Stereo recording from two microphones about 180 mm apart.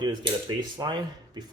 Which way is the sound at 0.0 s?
25° right (ahead or behind).